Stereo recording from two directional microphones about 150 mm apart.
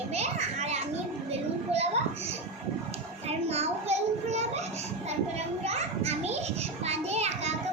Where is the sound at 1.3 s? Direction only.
45° right (ahead or behind).